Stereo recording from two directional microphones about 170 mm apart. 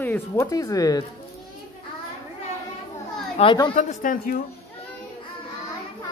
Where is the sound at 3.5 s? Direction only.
25° left (ahead or behind).